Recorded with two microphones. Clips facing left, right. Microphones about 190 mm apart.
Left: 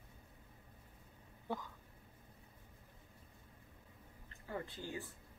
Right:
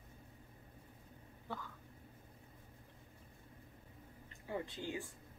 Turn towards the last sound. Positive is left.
turn(degrees=-20)  # may be behind; listen again after turning